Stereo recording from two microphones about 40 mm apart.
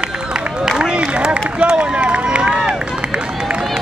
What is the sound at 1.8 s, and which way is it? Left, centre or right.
Run, right.